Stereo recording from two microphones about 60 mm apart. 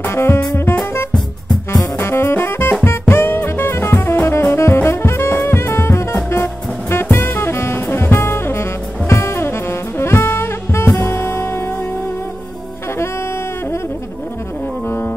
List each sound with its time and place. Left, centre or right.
0.0 s music: left
2.0 s music: left
14.9 s music: left